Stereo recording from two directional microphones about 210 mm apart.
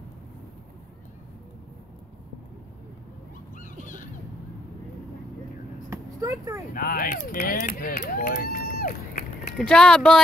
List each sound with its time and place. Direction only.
3.5 s dog: 40° left (ahead or behind)
5.9 s a sound: 15° right (ahead or behind)
6.7 s speech: 40° left (ahead or behind)
9.6 s speech: 5° left (ahead or behind)